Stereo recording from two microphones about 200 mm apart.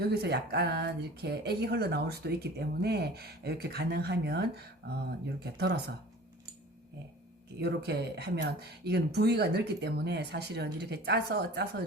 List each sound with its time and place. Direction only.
0.0 s speech: 50° right (ahead or behind)
7.6 s speech: 55° right (ahead or behind)